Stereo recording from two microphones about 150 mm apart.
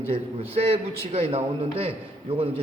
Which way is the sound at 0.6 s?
45° right (ahead or behind).